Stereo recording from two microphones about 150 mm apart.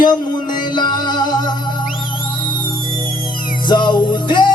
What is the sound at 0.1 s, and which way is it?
Music, 30° left (ahead or behind).